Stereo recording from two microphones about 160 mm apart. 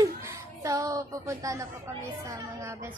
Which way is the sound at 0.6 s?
20° right (ahead or behind).